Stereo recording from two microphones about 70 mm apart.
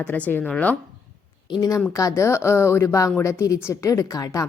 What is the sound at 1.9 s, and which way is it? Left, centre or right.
Speech, left.